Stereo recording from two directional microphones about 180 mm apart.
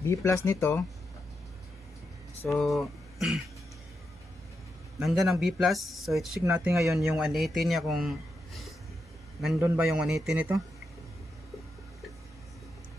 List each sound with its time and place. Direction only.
0.0 s speech: 15° left (ahead or behind)
2.4 s speech: centre (ahead or behind)
5.0 s speech: centre (ahead or behind)